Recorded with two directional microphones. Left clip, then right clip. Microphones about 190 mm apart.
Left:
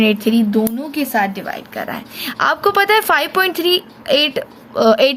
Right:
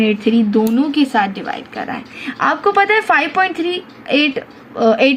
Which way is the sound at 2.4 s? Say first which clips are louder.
Right 1 dB; 50° left (ahead or behind).